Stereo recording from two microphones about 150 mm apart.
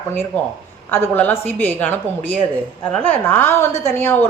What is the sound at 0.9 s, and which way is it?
A woman's voice, 15° left (ahead or behind).